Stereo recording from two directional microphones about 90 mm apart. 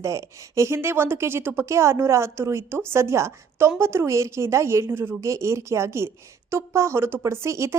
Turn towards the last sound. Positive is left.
turn(degrees=-30)  # may be behind; listen again after turning